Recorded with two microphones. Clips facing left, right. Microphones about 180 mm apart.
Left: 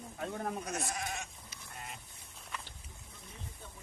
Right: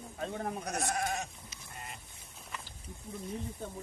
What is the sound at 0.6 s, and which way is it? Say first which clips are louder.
Speech: right 4 dB; 65° right (ahead or behind).